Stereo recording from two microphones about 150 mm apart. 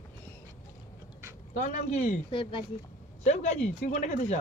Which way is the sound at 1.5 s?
60° left (ahead or behind).